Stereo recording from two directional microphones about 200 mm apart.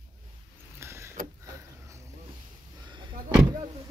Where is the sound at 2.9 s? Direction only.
25° right (ahead or behind).